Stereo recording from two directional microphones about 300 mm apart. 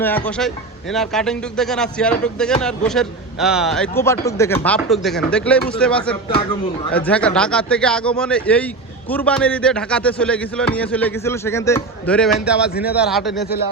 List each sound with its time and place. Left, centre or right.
0.0 s speech: centre
13.4 s speech: left